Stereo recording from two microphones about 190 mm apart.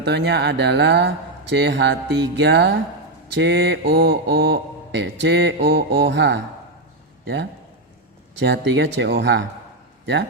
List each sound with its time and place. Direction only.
0.0 s speech: 60° right (ahead or behind)
8.4 s speech: 65° right (ahead or behind)